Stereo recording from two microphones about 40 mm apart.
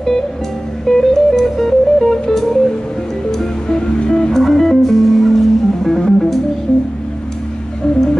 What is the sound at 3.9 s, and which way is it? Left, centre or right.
Music, left.